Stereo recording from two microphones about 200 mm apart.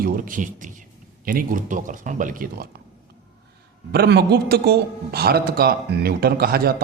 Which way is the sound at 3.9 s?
55° right (ahead or behind).